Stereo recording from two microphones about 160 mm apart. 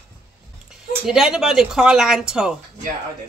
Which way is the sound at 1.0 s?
5° right (ahead or behind).